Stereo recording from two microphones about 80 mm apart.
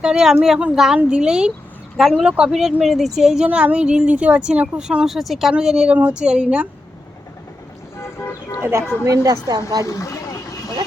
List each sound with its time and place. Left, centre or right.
0.0 s a woman's voice: centre
8.0 s vehicle: left
9.0 s speech: right
9.8 s vehicle: left